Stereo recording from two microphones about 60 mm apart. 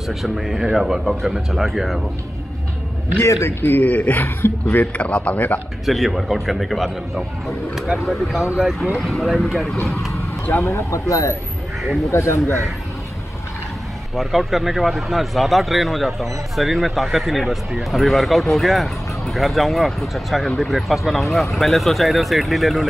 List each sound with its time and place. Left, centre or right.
0.1 s speech: centre
3.2 s speech: left
3.8 s speech: left
4.9 s speech: left
5.9 s speech: centre
10.6 s speech: left
14.1 s speech: centre